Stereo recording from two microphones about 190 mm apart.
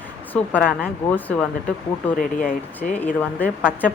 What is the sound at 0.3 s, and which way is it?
A woman's voice, 10° left (ahead or behind).